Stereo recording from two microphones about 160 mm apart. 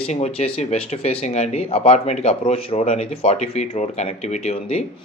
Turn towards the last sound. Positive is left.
turn(degrees=40)  # may be behind; listen again after turning